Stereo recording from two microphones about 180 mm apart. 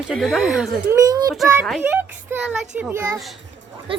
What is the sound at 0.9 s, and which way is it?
Speech, 20° right (ahead or behind).